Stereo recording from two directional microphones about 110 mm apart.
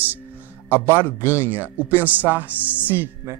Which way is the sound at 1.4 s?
15° right (ahead or behind).